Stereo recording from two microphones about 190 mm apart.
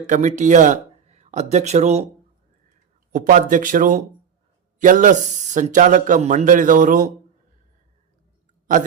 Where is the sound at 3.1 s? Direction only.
45° right (ahead or behind).